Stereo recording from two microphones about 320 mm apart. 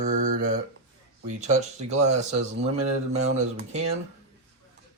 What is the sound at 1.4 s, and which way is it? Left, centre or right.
Speech, right.